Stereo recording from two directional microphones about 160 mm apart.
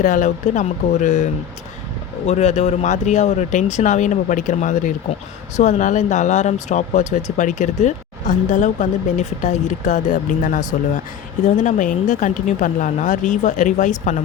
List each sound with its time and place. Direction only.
0.0 s speech: 55° left (ahead or behind)